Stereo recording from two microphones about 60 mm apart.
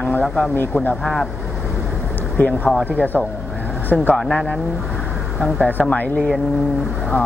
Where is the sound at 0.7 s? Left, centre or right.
Left.